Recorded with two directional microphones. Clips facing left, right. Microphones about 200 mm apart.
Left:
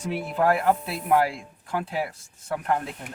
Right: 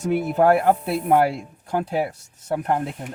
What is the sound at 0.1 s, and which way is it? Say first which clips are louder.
Speech: right 6 dB; 55° right (ahead or behind).